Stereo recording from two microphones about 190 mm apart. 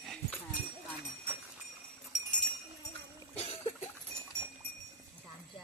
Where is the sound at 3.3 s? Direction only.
30° left (ahead or behind).